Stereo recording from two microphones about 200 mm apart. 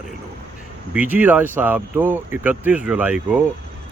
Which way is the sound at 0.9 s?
10° right (ahead or behind).